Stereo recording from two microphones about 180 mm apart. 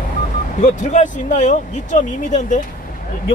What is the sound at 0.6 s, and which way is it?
Speech, 45° left (ahead or behind).